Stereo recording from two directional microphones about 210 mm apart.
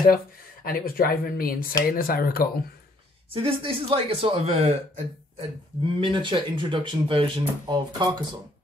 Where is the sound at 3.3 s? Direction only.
25° right (ahead or behind).